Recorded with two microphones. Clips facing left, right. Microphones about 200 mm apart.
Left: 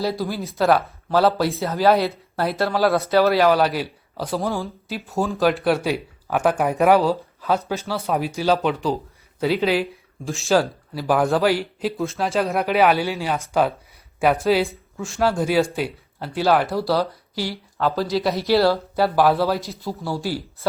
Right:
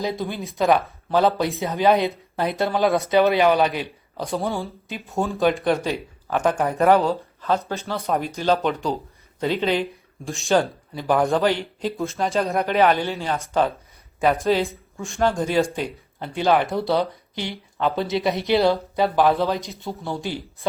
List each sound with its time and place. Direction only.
0.2 s speech: centre (ahead or behind)
18.3 s speech: 20° right (ahead or behind)
18.9 s speech: 5° left (ahead or behind)